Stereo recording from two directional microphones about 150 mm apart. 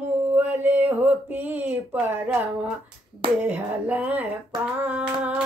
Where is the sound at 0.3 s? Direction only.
15° right (ahead or behind).